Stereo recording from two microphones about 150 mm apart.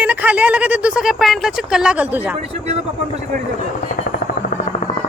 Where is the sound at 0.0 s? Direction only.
10° right (ahead or behind).